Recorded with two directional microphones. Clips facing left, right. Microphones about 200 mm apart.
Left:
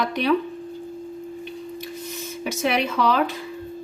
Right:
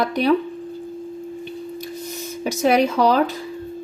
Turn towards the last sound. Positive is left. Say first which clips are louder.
# right 5 dB
turn(degrees=-40)  # may be behind; listen again after turning